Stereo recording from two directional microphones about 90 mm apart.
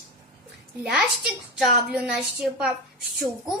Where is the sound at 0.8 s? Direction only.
5° right (ahead or behind).